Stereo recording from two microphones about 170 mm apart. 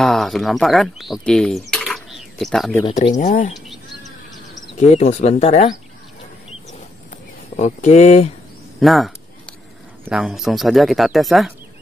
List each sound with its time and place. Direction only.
0.0 s speech: centre (ahead or behind)
1.9 s a sound: centre (ahead or behind)
3.2 s speech: 45° left (ahead or behind)
4.7 s speech: 40° left (ahead or behind)
7.1 s a sound: 45° left (ahead or behind)
8.7 s speech: centre (ahead or behind)